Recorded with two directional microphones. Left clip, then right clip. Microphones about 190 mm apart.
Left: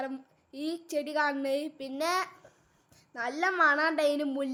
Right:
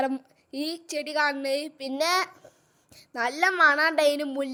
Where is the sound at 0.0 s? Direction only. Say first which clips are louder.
Right 9 dB; 40° right (ahead or behind).